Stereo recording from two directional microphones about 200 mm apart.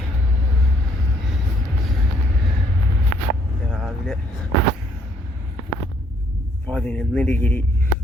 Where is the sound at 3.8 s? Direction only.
5° left (ahead or behind).